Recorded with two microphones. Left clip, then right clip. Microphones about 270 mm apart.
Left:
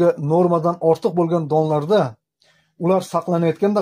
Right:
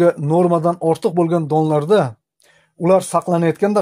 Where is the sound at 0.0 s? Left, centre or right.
Right.